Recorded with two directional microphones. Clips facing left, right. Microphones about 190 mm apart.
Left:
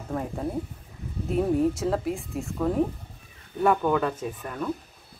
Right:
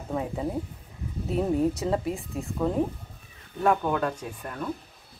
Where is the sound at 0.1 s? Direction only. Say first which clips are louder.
Even; 5° right (ahead or behind).